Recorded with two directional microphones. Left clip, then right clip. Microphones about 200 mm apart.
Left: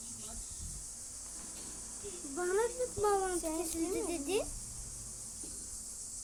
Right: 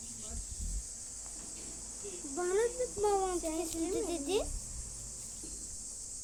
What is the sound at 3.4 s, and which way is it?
Speech, 20° left (ahead or behind).